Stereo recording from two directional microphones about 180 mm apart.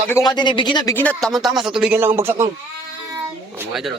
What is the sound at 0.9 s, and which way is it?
Speech, 10° left (ahead or behind).